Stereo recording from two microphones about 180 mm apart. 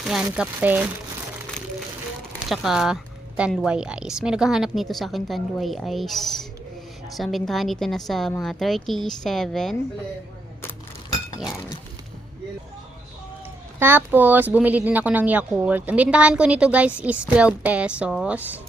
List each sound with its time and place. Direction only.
0.0 s speech: 5° right (ahead or behind)
2.5 s a woman's voice: centre (ahead or behind)
13.7 s speech: 10° right (ahead or behind)